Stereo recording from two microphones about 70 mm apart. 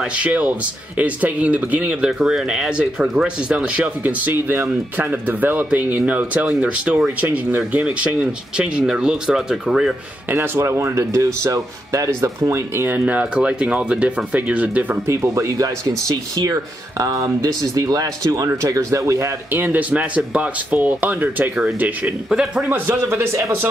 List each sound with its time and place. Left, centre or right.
0.0 s speech: centre
2.0 s speech: centre
10.3 s speech: right
12.1 s speech: right
13.0 s speech: centre
15.0 s speech: right
17.0 s speech: right
18.5 s speech: right
19.5 s speech: right
22.3 s speech: centre
22.7 s speech: right